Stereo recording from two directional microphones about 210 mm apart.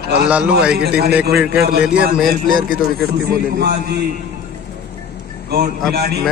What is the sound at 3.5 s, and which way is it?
Speech, 50° right (ahead or behind).